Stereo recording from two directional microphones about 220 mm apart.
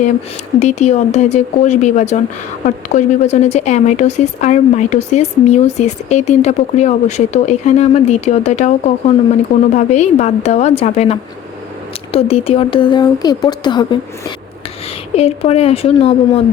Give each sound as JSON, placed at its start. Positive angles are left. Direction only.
{"t": 0.6, "sound": "speech", "side_deg": 30}